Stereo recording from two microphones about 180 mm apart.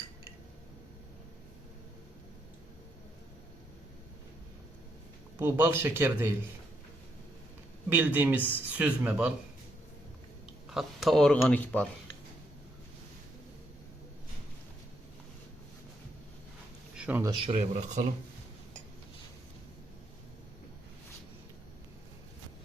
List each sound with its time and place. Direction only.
5.4 s speech: 15° right (ahead or behind)
7.9 s speech: 10° right (ahead or behind)
10.7 s speech: centre (ahead or behind)
17.0 s a sound: 10° right (ahead or behind)
17.5 s speech: 40° right (ahead or behind)